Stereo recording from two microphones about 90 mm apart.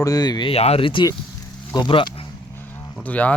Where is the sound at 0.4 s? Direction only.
75° left (ahead or behind).